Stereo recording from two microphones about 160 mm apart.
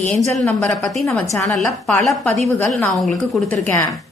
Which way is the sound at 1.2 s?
5° left (ahead or behind).